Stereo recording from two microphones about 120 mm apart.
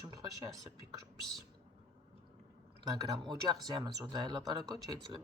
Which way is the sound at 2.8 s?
35° right (ahead or behind).